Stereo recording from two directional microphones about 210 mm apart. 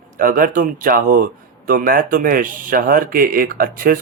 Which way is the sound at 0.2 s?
40° right (ahead or behind).